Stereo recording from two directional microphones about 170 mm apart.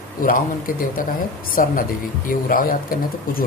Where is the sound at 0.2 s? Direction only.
55° left (ahead or behind).